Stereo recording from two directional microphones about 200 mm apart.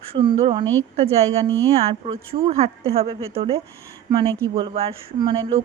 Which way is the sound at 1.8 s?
30° right (ahead or behind).